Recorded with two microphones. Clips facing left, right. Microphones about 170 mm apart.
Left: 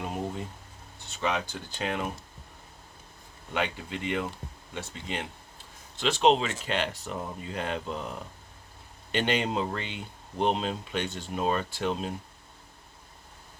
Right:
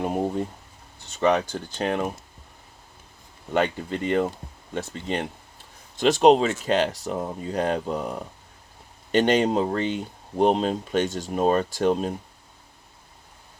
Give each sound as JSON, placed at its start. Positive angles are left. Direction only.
{"t": 0.0, "sound": "speech", "side_deg": -45}
{"t": 3.5, "sound": "speech", "side_deg": -45}
{"t": 6.0, "sound": "speech", "side_deg": -45}